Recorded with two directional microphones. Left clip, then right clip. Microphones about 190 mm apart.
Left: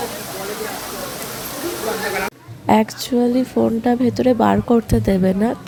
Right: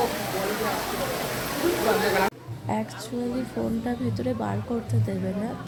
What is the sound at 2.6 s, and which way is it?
Speech, 45° left (ahead or behind).